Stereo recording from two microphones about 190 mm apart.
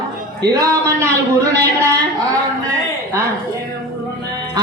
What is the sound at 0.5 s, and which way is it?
Speech, 15° right (ahead or behind).